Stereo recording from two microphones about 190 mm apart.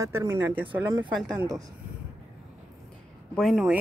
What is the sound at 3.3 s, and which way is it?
Speech, centre (ahead or behind).